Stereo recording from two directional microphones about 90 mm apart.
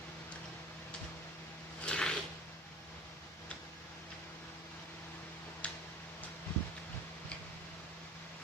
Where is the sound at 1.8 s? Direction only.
10° left (ahead or behind).